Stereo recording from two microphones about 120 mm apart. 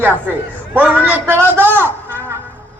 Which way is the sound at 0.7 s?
15° right (ahead or behind).